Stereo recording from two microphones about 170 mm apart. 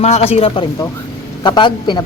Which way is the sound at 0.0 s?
40° left (ahead or behind).